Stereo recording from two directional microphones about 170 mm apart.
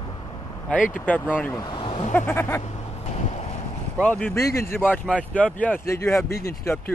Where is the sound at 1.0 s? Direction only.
10° left (ahead or behind).